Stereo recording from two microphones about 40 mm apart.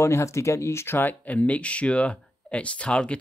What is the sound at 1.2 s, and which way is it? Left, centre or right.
Speech, left.